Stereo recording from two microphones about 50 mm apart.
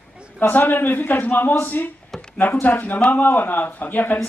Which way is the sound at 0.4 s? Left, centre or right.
Left.